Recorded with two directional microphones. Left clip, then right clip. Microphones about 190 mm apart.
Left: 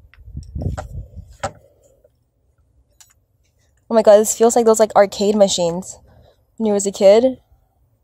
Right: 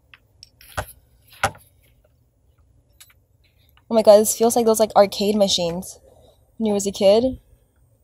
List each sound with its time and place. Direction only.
3.8 s a woman's voice: 30° left (ahead or behind)